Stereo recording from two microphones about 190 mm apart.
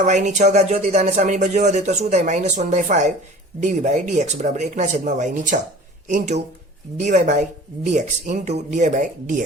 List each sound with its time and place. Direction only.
0.0 s speech: 40° right (ahead or behind)